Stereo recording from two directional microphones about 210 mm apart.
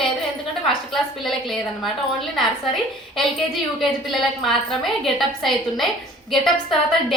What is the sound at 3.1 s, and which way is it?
A woman's voice, centre (ahead or behind).